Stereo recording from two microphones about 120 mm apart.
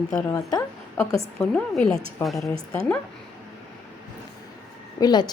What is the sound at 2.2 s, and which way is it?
Speech, 20° left (ahead or behind).